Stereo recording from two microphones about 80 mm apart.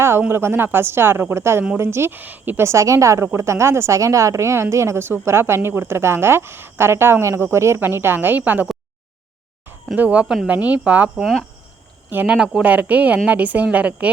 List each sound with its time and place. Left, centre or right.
0.0 s a woman's voice: right
2.6 s a woman's voice: right
9.9 s a woman's voice: centre
12.1 s a woman's voice: centre